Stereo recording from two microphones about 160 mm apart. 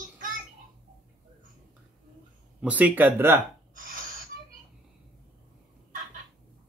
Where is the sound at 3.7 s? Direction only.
55° right (ahead or behind).